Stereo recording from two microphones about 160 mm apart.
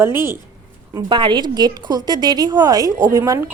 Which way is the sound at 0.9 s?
30° right (ahead or behind).